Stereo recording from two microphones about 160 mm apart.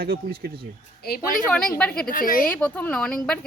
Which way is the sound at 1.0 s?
65° left (ahead or behind).